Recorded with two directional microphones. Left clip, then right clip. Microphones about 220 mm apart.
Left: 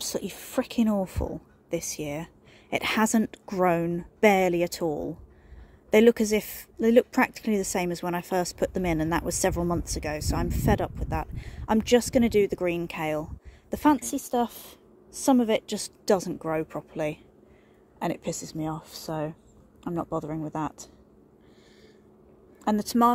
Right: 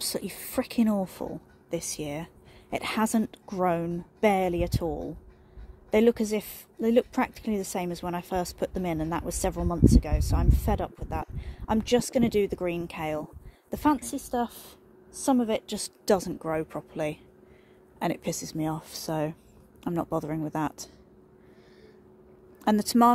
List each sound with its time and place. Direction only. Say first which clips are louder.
0.0 s a woman's voice: left 1 dB; 10° left (ahead or behind)
22.6 s speech: right 1 dB; 5° right (ahead or behind)